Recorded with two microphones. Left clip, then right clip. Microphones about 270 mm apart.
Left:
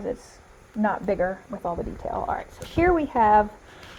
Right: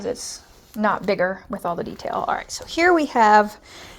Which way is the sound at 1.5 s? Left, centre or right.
Right.